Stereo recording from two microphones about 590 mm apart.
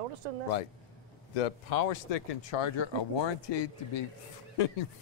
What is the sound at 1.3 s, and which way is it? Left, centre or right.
Speech, left.